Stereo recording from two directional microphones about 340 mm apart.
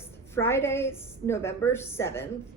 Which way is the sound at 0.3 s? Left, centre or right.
Centre.